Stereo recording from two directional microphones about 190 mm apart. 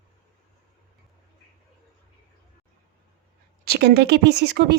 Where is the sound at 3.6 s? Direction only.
60° right (ahead or behind).